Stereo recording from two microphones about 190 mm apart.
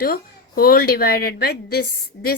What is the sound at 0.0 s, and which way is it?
Speech, 50° left (ahead or behind).